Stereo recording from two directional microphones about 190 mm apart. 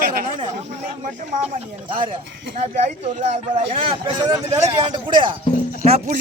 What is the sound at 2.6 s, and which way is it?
Speech, 35° right (ahead or behind).